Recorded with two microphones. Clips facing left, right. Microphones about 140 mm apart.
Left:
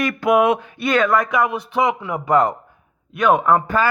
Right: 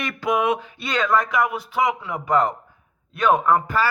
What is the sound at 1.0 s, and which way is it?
A man's voice, 15° left (ahead or behind).